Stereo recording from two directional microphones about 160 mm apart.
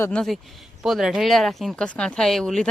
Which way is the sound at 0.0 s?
5° left (ahead or behind).